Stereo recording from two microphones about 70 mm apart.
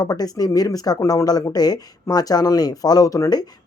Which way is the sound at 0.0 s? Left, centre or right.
Left.